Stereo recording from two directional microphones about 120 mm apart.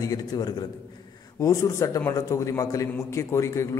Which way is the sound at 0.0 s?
30° left (ahead or behind).